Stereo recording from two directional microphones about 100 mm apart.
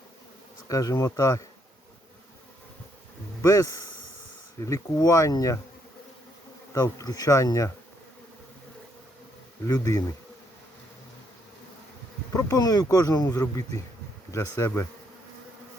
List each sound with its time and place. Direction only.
0.7 s speech: 35° left (ahead or behind)
3.4 s speech: 35° left (ahead or behind)
6.7 s speech: 35° left (ahead or behind)
9.6 s speech: 35° left (ahead or behind)
12.3 s speech: 35° left (ahead or behind)
14.3 s speech: 30° left (ahead or behind)